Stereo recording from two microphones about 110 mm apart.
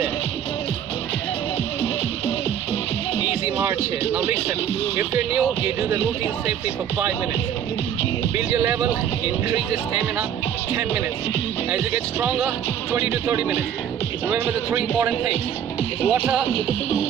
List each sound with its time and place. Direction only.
4.1 s speech: 15° right (ahead or behind)
8.5 s speech: 20° right (ahead or behind)
11.7 s speech: 15° right (ahead or behind)